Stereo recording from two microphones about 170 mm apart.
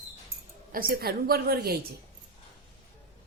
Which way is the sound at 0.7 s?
60° right (ahead or behind).